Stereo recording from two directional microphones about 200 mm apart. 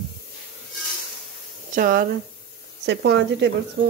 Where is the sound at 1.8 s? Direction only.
45° right (ahead or behind).